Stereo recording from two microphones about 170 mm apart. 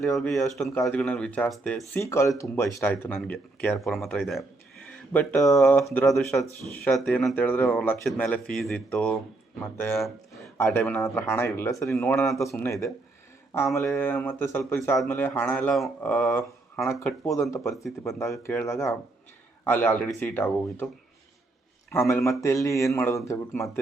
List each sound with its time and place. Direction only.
0.1 s speech: centre (ahead or behind)
1.9 s speech: 15° left (ahead or behind)
3.9 s speech: centre (ahead or behind)
21.8 s a man's voice: 15° left (ahead or behind)